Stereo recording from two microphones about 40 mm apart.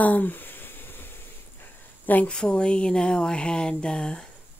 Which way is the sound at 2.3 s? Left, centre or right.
Left.